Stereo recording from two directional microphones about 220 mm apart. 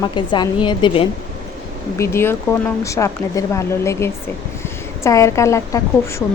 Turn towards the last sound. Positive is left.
turn(degrees=15)  # may be behind; listen again after turning